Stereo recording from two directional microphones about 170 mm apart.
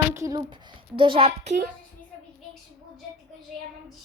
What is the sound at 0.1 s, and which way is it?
A woman's voice, 20° right (ahead or behind).